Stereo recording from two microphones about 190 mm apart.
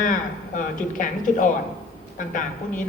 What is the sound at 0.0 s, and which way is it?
A woman's voice, 45° left (ahead or behind).